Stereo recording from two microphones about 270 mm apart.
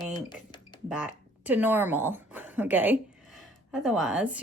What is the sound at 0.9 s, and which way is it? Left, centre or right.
A woman's voice, centre.